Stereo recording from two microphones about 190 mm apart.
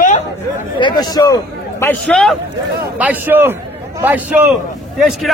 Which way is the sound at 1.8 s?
5° left (ahead or behind).